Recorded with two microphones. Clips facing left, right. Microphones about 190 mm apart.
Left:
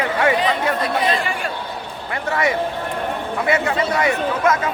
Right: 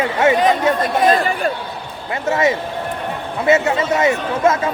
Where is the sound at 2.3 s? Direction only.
25° right (ahead or behind).